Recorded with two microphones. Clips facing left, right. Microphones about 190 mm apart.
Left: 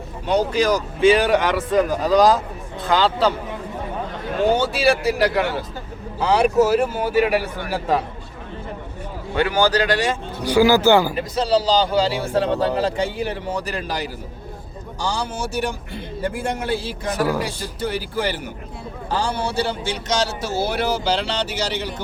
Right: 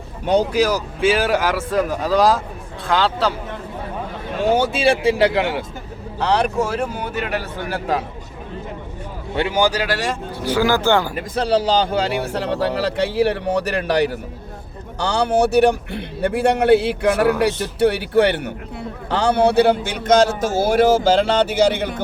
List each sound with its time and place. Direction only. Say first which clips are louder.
0.5 s speech: right 1 dB; 5° right (ahead or behind)
4.4 s speech: right 1 dB; centre (ahead or behind)
4.7 s a man's voice: right 2 dB; 25° right (ahead or behind)
6.1 s speech: left 3 dB; 5° left (ahead or behind)
9.3 s speech: even; 25° right (ahead or behind); by 10.2 s centre (ahead or behind)
10.4 s speech: left 3 dB; 10° left (ahead or behind)
11.2 s a man's voice: right 1 dB; 55° right (ahead or behind)